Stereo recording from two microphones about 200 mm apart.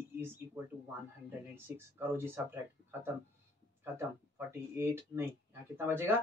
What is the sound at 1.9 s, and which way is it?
Speech, 10° right (ahead or behind).